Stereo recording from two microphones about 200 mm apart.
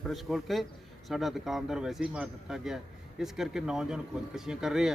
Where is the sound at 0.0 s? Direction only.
Centre (ahead or behind).